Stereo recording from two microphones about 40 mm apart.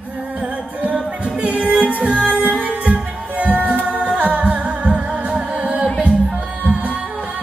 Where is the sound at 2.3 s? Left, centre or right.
Right.